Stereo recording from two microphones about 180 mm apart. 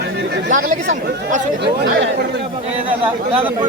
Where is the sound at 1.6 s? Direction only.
70° right (ahead or behind).